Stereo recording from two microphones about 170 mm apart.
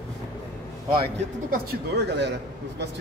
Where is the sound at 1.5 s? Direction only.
80° right.